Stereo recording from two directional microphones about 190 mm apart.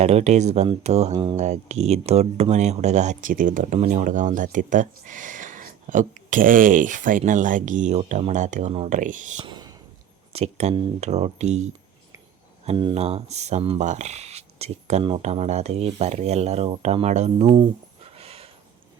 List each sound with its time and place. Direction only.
0.0 s speech: 35° right (ahead or behind)
1.1 s speech: 25° right (ahead or behind)
1.4 s speech: 35° right (ahead or behind)
9.4 s a sound: 25° right (ahead or behind)
10.3 s speech: 35° right (ahead or behind)